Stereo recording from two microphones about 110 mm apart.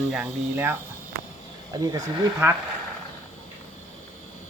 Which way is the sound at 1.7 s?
35° right (ahead or behind).